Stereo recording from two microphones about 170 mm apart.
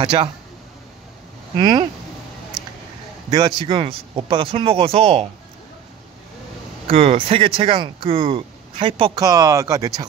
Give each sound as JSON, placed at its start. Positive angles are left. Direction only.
{"t": 0.0, "sound": "speech", "side_deg": -30}
{"t": 1.6, "sound": "speech", "side_deg": -25}
{"t": 3.3, "sound": "speech", "side_deg": -25}
{"t": 6.9, "sound": "speech", "side_deg": -35}
{"t": 9.2, "sound": "speech", "side_deg": -20}